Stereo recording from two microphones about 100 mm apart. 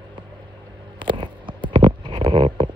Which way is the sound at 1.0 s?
55° right (ahead or behind).